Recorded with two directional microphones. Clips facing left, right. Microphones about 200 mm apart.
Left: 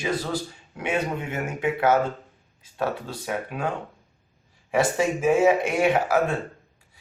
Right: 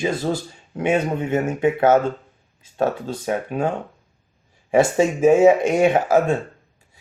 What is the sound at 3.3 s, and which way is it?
Speech, 25° right (ahead or behind).